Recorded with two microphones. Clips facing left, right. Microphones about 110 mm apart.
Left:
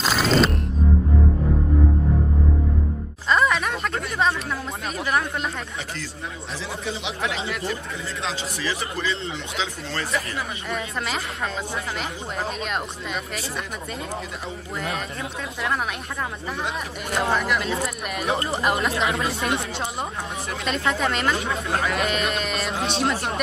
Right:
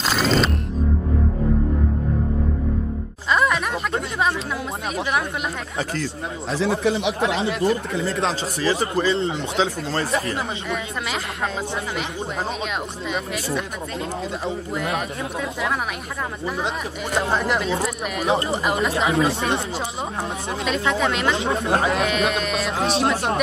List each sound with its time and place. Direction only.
0.0 s music: centre (ahead or behind)
3.3 s music: centre (ahead or behind)
6.6 s speech: 65° right (ahead or behind)
7.2 s speech: 25° right (ahead or behind)
8.0 s speech: 40° right (ahead or behind)
10.7 s speech: centre (ahead or behind)
14.8 s speech: 5° right (ahead or behind)
17.3 s speech: 30° right (ahead or behind)
17.6 s speech: centre (ahead or behind)
20.6 s speech: centre (ahead or behind)
21.4 s speech: 25° right (ahead or behind)
21.9 s speech: centre (ahead or behind)